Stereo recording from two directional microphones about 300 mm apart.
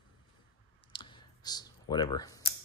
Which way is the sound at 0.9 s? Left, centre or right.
Centre.